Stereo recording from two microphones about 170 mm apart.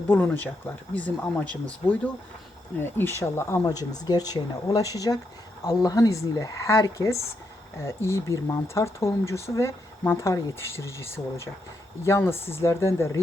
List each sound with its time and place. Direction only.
0.1 s speech: 10° left (ahead or behind)
2.7 s speech: 10° left (ahead or behind)